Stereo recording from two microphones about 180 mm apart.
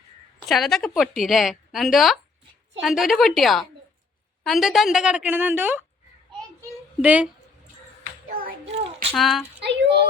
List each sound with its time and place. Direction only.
0.4 s speech: centre (ahead or behind)
7.0 s speech: 5° right (ahead or behind)
8.3 s hands: 55° right (ahead or behind)
9.1 s speech: centre (ahead or behind)
9.6 s speech: 70° right (ahead or behind)